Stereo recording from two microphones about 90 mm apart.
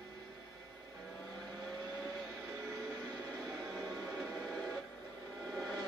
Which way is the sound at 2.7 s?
45° right (ahead or behind).